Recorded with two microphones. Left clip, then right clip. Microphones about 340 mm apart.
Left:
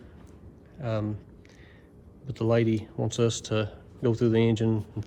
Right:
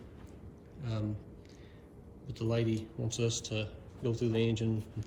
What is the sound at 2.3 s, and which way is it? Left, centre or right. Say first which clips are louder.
Speech: left 9 dB; centre.